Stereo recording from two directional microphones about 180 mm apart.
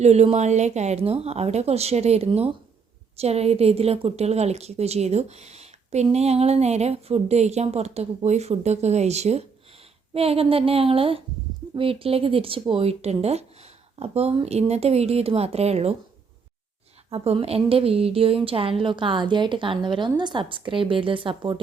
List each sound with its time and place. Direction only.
0.0 s a woman's voice: 35° right (ahead or behind)
17.1 s a woman's voice: 35° right (ahead or behind)